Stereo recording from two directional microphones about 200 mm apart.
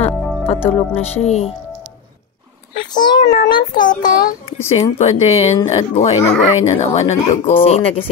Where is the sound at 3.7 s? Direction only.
40° left (ahead or behind).